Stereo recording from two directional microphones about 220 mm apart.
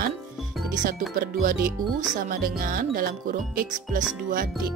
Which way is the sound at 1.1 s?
40° right (ahead or behind).